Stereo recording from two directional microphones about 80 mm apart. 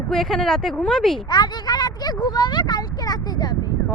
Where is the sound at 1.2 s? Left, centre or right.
Left.